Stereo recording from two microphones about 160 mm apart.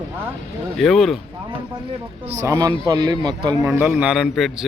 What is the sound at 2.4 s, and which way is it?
A man's voice, 20° right (ahead or behind).